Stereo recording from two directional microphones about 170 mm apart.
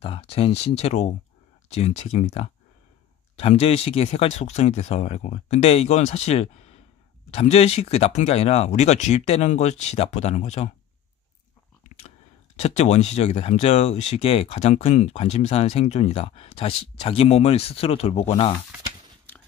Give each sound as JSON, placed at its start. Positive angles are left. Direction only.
{"t": 0.0, "sound": "speech", "side_deg": 35}
{"t": 11.9, "sound": "a sound", "side_deg": 50}
{"t": 12.5, "sound": "speech", "side_deg": 40}
{"t": 19.3, "sound": "biting", "side_deg": 10}